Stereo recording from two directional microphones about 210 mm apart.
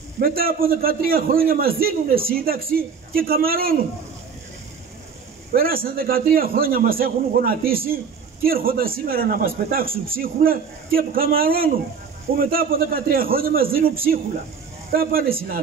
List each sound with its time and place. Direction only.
0.2 s a man's voice: 45° right (ahead or behind)
5.5 s a man's voice: 45° right (ahead or behind)